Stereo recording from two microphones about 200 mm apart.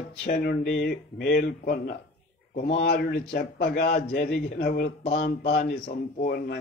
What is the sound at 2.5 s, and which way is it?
Speech, 35° left (ahead or behind).